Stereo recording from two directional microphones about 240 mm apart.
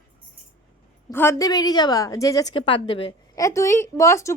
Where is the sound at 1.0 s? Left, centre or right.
Centre.